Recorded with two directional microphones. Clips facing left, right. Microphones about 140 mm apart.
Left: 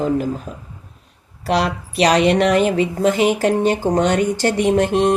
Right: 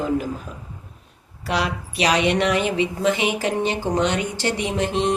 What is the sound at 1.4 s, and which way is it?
A woman's voice, 40° left (ahead or behind).